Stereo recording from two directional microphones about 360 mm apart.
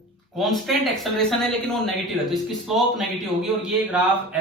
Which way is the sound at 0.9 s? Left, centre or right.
Centre.